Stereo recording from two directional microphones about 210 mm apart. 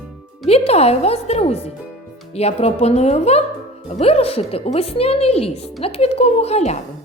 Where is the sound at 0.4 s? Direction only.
30° left (ahead or behind).